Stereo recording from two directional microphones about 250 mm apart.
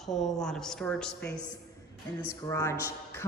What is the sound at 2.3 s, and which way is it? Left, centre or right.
Speech, centre.